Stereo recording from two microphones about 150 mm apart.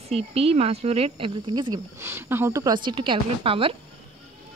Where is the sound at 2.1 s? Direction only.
15° right (ahead or behind); by 3.7 s 40° right (ahead or behind).